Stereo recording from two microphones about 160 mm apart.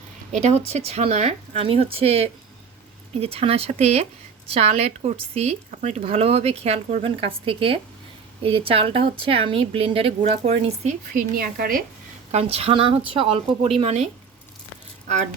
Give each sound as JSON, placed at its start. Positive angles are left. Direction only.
{"t": 0.3, "sound": "speech", "side_deg": -45}
{"t": 11.1, "sound": "speech", "side_deg": -60}
{"t": 12.3, "sound": "speech", "side_deg": -40}